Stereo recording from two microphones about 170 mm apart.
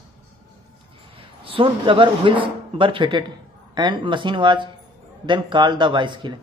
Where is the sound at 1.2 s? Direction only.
30° right (ahead or behind).